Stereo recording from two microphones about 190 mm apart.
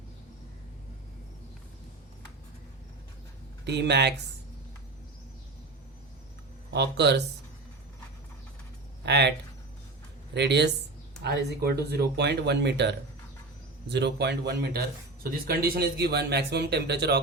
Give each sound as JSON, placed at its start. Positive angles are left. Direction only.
{"t": 3.7, "sound": "speech", "side_deg": -65}
{"t": 6.7, "sound": "speech", "side_deg": -60}
{"t": 9.0, "sound": "speech", "side_deg": -65}
{"t": 10.3, "sound": "speech", "side_deg": -65}